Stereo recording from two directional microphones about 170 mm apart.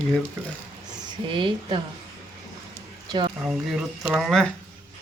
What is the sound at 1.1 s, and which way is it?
Speech, 30° right (ahead or behind).